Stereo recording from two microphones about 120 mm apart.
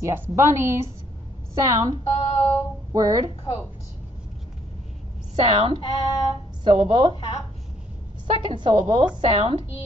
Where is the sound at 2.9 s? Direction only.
30° right (ahead or behind).